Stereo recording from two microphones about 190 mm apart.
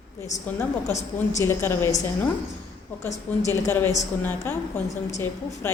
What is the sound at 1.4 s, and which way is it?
Speech, 15° left (ahead or behind).